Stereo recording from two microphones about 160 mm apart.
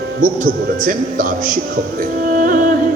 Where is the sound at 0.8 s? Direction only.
60° right (ahead or behind).